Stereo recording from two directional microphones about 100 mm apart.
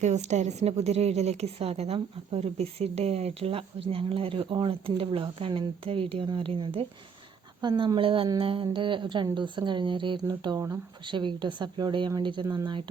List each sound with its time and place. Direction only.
0.2 s a woman's voice: 90° right; by 6.8 s 60° right (ahead or behind)
7.6 s speech: 45° right (ahead or behind)
7.9 s a woman's voice: 60° right (ahead or behind)
10.2 s speech: 40° right (ahead or behind)